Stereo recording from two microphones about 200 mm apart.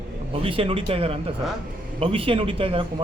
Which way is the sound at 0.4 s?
25° right (ahead or behind).